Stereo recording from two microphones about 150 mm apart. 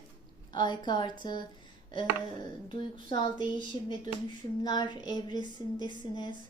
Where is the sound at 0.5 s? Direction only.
30° left (ahead or behind).